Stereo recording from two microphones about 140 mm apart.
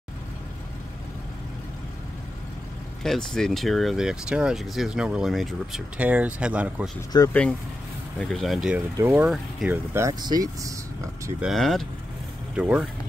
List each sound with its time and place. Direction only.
3.0 s speech: 5° left (ahead or behind)
7.1 s speech: 30° left (ahead or behind)
8.2 s speech: 5° left (ahead or behind)
8.9 s speech: 15° right (ahead or behind)
11.4 s speech: centre (ahead or behind)